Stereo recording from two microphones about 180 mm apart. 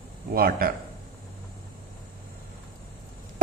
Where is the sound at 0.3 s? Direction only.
55° right (ahead or behind).